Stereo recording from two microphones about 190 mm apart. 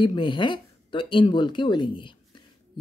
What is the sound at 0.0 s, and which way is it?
Speech, 25° left (ahead or behind).